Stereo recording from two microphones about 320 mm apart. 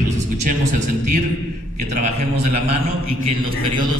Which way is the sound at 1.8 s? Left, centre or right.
Right.